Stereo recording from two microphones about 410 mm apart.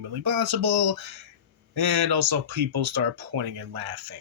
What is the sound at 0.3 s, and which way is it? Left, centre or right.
Speech, right.